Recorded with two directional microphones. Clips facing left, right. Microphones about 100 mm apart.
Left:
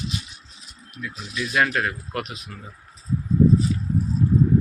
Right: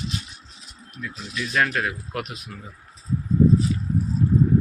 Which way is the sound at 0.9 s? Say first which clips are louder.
Even; 5° left (ahead or behind).